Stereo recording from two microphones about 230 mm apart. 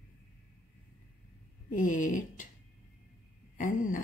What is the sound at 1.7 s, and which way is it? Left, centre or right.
Speech, left.